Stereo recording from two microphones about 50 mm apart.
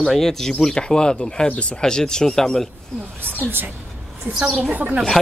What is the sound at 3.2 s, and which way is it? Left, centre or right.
Speech, right.